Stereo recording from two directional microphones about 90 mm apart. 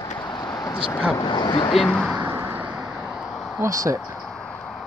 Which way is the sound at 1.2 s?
65° left (ahead or behind).